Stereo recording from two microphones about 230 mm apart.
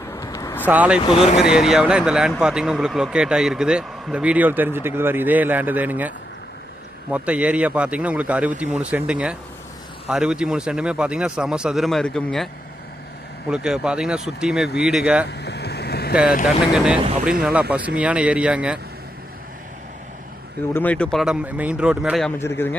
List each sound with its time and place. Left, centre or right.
0.1 s vehicle: centre
0.6 s speech: centre
0.9 s speech: left
1.4 s speech: centre
13.5 s speech: centre
15.3 s vehicle: left
16.7 s speech: centre
17.0 s speech: right
17.4 s speech: centre
20.7 s speech: centre
22.4 s speech: centre